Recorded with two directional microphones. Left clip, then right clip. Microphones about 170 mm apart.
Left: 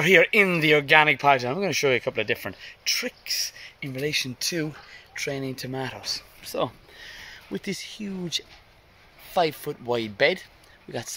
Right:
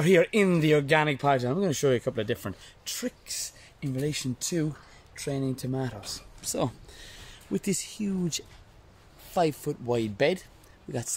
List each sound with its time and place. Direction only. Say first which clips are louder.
0.0 s speech: left 5 dB; 5° right (ahead or behind)
6.5 s speech: left 3 dB; 30° right (ahead or behind)
9.3 s speech: left 3 dB; 20° right (ahead or behind)